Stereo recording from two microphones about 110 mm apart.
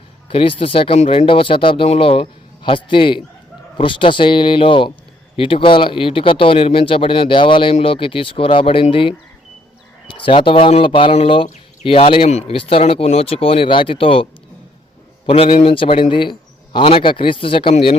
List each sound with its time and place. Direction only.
0.3 s a man's voice: 55° left (ahead or behind)
11.1 s speech: 60° left (ahead or behind)
15.3 s a man's voice: 55° left (ahead or behind)